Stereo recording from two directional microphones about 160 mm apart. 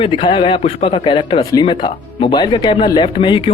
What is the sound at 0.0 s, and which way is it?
Speech, 30° left (ahead or behind).